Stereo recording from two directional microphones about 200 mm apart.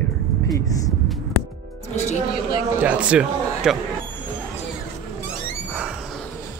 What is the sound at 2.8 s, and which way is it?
Speech, 5° right (ahead or behind).